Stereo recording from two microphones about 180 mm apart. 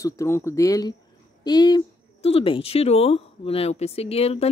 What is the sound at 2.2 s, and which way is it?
Speech, 30° left (ahead or behind).